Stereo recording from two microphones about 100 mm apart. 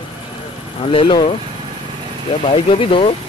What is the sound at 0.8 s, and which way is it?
Speech, 60° left (ahead or behind).